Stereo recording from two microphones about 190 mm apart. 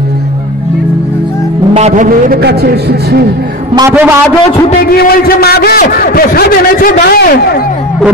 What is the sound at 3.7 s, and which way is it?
Speech, 15° right (ahead or behind).